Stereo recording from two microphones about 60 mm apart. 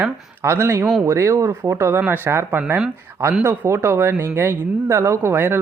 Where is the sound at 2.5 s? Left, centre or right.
Right.